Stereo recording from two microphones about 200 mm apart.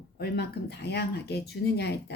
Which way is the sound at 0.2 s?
55° left (ahead or behind).